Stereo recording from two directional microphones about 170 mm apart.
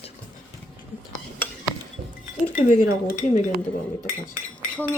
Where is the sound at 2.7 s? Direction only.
55° left (ahead or behind).